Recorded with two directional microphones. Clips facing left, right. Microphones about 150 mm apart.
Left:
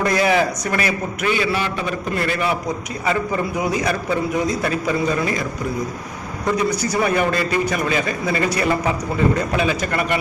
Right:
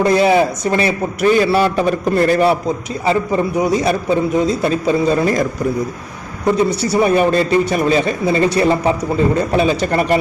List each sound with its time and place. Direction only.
0.0 s a man's voice: 25° right (ahead or behind)
1.3 s a man's voice: 40° right (ahead or behind)
6.6 s a man's voice: 30° right (ahead or behind)